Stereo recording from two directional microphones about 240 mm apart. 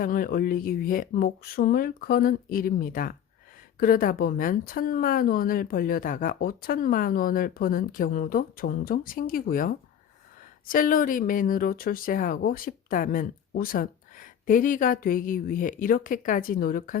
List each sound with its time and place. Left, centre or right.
0.0 s speech: left